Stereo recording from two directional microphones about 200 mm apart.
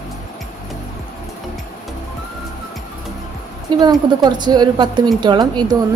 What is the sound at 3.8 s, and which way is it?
A woman's voice, 20° right (ahead or behind).